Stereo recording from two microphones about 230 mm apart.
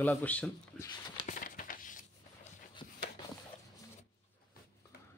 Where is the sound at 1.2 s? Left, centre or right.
Left.